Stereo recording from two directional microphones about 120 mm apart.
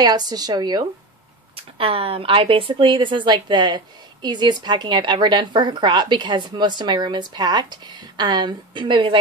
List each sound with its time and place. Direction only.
0.0 s speech: 35° right (ahead or behind)
1.5 s speech: 50° right (ahead or behind)